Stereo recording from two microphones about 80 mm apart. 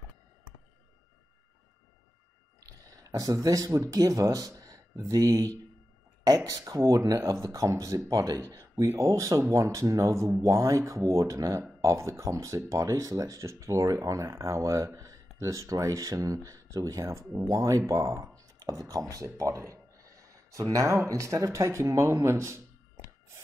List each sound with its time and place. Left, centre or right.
3.0 s speech: right
19.1 s a sound: right
20.7 s speech: right